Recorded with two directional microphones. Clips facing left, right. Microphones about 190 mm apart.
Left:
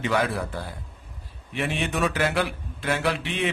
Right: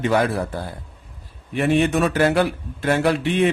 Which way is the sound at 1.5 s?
45° right (ahead or behind).